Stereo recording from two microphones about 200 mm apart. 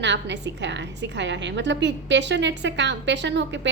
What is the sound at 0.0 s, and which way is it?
A woman's voice, 60° right (ahead or behind).